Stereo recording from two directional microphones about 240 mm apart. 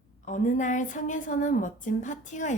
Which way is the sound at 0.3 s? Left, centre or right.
Left.